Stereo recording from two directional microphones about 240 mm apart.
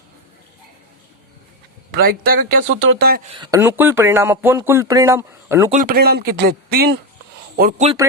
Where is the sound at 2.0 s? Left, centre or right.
Right.